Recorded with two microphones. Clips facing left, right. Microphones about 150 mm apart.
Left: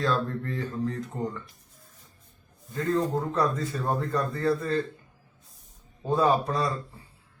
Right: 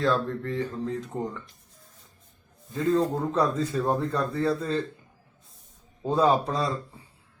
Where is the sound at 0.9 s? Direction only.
20° right (ahead or behind).